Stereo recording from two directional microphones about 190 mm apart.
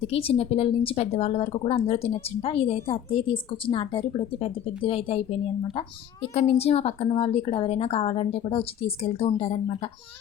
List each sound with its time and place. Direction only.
0.1 s speech: 30° left (ahead or behind)
6.5 s speech: 30° left (ahead or behind)